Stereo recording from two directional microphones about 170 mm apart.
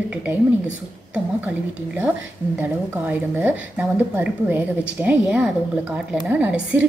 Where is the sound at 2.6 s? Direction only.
10° right (ahead or behind).